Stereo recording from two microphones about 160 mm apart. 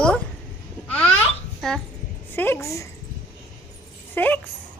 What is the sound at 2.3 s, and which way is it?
Speech, 15° left (ahead or behind).